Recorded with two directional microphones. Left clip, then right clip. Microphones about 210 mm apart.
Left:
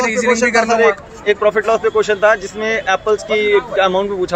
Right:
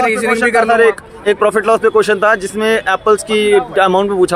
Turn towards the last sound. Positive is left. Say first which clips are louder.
# right 4 dB
turn(degrees=-60)  # may be behind; listen again after turning